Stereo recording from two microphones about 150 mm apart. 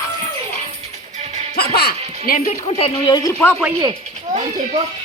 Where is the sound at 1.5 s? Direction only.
90° left; by 2.5 s 75° left (ahead or behind).